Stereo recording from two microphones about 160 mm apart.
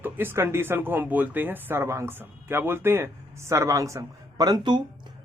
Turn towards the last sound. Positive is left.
turn(degrees=-25)  # may be behind; listen again after turning